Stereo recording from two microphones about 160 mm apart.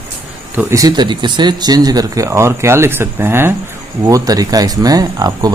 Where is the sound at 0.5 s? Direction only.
20° right (ahead or behind).